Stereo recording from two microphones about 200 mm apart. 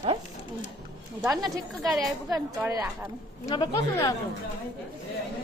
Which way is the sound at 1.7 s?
Centre (ahead or behind).